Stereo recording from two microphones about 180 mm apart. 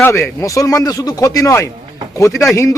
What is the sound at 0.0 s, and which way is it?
Speech, 15° left (ahead or behind).